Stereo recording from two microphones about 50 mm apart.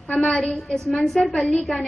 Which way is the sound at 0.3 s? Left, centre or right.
Centre.